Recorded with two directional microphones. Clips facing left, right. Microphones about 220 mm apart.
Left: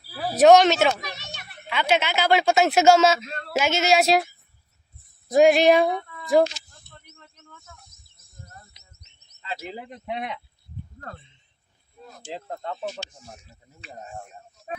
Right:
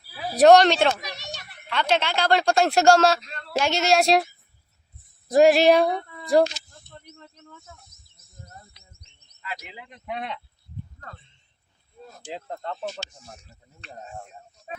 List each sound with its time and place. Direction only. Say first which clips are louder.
0.3 s speech: even; centre (ahead or behind)
3.2 s a sound: left 5 dB; 45° left (ahead or behind)
3.6 s speech: even; centre (ahead or behind)
5.3 s speech: even; centre (ahead or behind)
9.4 s speech: left 4 dB; 25° left (ahead or behind)
9.7 s speech: left 7 dB; 40° left (ahead or behind)
10.1 s speech: left 1 dB; 15° left (ahead or behind)
12.3 s speech: even; centre (ahead or behind)